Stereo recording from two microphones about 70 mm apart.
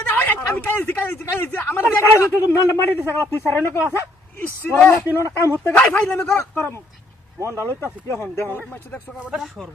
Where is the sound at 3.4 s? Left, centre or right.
Left.